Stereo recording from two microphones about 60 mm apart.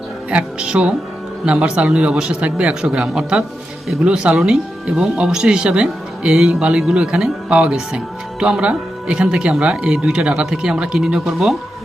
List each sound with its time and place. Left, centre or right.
0.3 s a man's voice: centre